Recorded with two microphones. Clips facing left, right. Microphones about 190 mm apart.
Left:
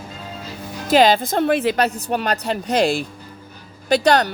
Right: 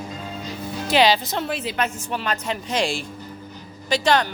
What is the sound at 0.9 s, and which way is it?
Speech, 50° left (ahead or behind).